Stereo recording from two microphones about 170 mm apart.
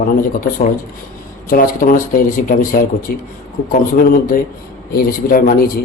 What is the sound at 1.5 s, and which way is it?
A man's voice, 55° left (ahead or behind).